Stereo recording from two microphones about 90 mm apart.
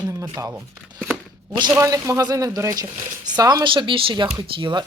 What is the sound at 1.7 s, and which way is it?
Speech, 35° right (ahead or behind).